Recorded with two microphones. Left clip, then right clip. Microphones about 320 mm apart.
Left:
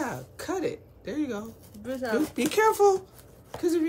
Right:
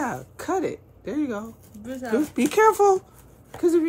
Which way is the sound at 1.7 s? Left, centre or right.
Centre.